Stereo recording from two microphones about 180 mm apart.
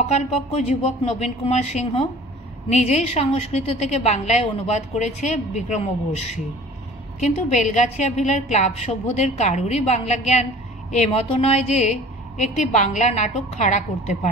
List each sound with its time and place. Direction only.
0.1 s a woman's voice: 40° left (ahead or behind)